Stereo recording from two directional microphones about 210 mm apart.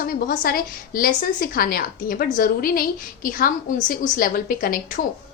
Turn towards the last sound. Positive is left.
turn(degrees=45)  # may be behind; listen again after turning